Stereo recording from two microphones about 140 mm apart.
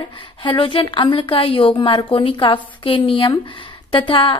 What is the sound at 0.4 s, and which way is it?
A woman's voice, 35° left (ahead or behind).